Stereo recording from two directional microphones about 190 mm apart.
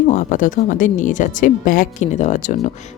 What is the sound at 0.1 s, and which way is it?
A woman's voice, 40° left (ahead or behind).